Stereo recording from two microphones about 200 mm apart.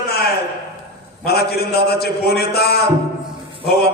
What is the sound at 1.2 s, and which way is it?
Mantra, 50° left (ahead or behind).